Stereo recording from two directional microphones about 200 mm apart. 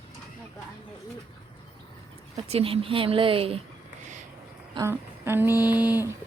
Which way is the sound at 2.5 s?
30° right (ahead or behind).